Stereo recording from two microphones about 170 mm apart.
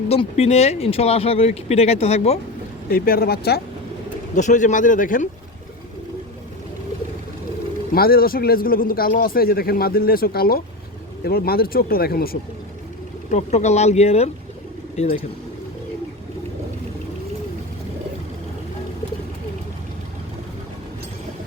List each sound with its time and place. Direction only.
0.1 s speech: 40° left (ahead or behind)
2.9 s speech: 60° left (ahead or behind)
4.4 s speech: 45° left (ahead or behind)
7.9 s speech: 60° left (ahead or behind)
13.3 s speech: 45° left (ahead or behind)